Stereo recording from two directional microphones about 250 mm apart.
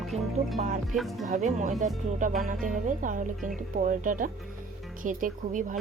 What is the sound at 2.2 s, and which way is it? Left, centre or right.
Music, right.